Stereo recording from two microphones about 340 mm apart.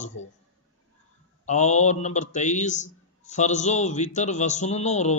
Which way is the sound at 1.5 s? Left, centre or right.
Centre.